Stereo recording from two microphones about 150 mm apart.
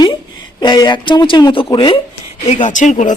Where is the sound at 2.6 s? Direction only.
55° left (ahead or behind).